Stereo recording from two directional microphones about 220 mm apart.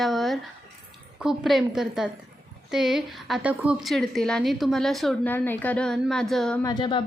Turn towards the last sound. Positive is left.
turn(degrees=20)  # may be behind; listen again after turning